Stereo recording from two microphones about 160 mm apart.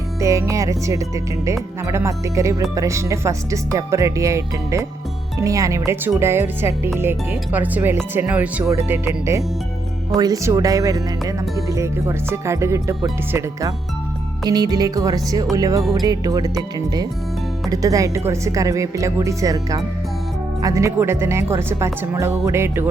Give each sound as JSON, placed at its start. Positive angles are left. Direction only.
{"t": 0.2, "sound": "speech", "side_deg": -20}
{"t": 17.7, "sound": "speech", "side_deg": -20}